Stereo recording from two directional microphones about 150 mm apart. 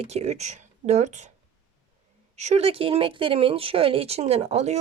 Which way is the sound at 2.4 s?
45° right (ahead or behind).